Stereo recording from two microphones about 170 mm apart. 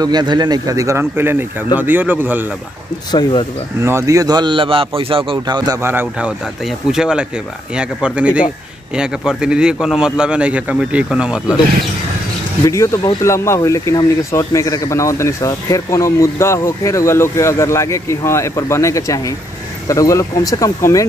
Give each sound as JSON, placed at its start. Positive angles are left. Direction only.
{"t": 0.0, "sound": "speech", "side_deg": -25}
{"t": 3.1, "sound": "speech", "side_deg": 25}
{"t": 3.8, "sound": "speech", "side_deg": -15}
{"t": 5.8, "sound": "a man's voice", "side_deg": -15}
{"t": 12.6, "sound": "speech", "side_deg": 20}